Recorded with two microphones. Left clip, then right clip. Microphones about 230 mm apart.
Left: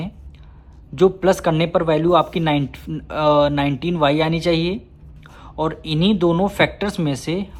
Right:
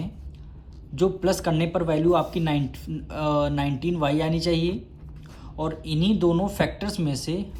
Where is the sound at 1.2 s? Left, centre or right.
Left.